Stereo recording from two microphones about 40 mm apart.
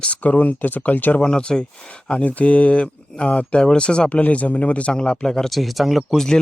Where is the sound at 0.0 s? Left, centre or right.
Left.